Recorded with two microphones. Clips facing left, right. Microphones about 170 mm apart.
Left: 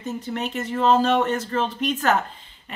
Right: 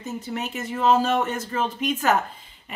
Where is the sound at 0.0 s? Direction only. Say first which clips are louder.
Left 2 dB; 5° right (ahead or behind).